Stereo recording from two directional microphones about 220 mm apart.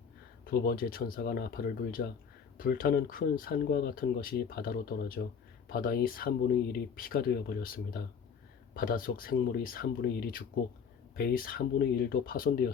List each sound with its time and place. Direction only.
0.5 s speech: 40° left (ahead or behind)